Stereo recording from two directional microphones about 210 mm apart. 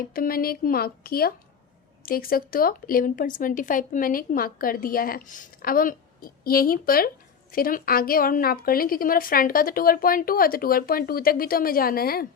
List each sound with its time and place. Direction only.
0.0 s speech: 45° left (ahead or behind)